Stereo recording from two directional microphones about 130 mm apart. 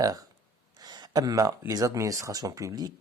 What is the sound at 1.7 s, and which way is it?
Speech, 25° right (ahead or behind).